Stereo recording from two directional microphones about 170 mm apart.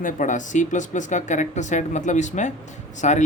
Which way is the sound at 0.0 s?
45° left (ahead or behind).